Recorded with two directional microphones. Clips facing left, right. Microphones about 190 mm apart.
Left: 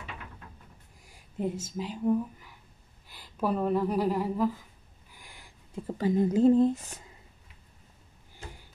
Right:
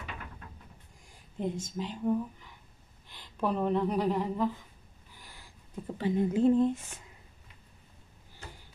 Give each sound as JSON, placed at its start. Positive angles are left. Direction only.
{"t": 1.0, "sound": "speech", "side_deg": 5}
{"t": 5.9, "sound": "speech", "side_deg": 40}